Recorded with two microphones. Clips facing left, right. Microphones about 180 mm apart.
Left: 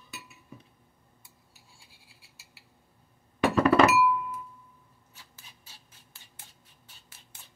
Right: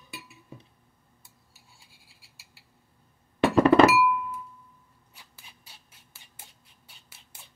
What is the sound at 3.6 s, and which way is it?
Music, 30° right (ahead or behind).